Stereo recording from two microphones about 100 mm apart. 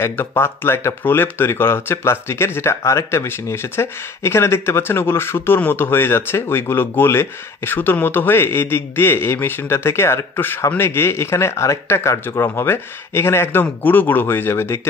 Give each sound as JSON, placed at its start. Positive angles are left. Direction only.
{"t": 0.0, "sound": "speech", "side_deg": 20}